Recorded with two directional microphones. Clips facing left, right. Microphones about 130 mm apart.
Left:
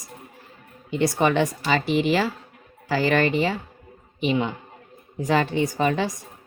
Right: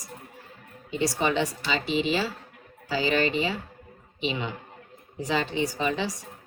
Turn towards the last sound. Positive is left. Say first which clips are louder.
# left 5 dB
turn(degrees=55)  # may be behind; listen again after turning